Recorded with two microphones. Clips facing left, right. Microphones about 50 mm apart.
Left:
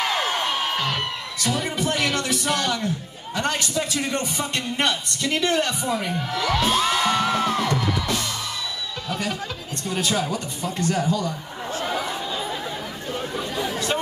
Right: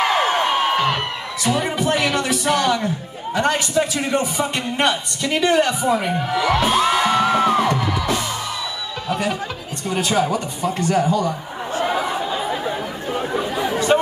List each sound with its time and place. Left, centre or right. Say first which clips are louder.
0.0 s a sound: right 6 dB; right
1.4 s a man's voice: right 5 dB; centre
9.8 s chuckle: right 5 dB; centre